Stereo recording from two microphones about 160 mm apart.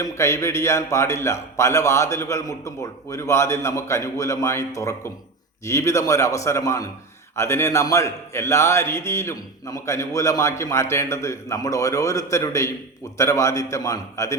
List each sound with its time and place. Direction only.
0.0 s a man's voice: 20° left (ahead or behind)